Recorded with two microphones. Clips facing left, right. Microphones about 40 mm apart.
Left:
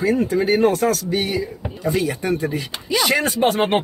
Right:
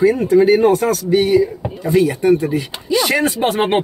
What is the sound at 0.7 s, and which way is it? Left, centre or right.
Speech, right.